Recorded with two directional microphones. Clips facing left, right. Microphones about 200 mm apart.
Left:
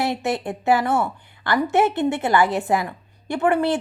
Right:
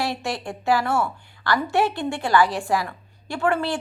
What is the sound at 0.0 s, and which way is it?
A woman's voice, 20° left (ahead or behind).